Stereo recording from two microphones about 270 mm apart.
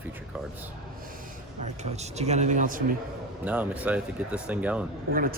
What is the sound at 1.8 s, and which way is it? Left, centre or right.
Speech, right.